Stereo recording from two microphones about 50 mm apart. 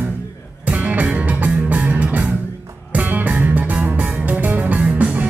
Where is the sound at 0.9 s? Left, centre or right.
Right.